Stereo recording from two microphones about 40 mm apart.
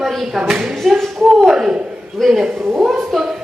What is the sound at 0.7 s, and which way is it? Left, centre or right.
Speech, centre.